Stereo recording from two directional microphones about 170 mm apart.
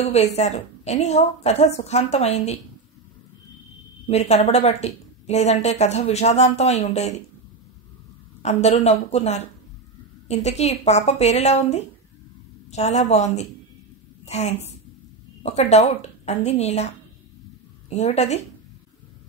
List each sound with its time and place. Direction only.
0.0 s a woman's voice: 40° left (ahead or behind)
4.1 s a woman's voice: 40° left (ahead or behind)
8.4 s a woman's voice: 40° left (ahead or behind)